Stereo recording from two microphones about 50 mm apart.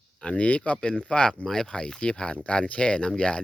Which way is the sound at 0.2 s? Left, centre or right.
Left.